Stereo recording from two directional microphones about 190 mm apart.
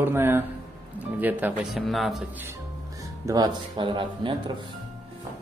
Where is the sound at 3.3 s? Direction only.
20° right (ahead or behind).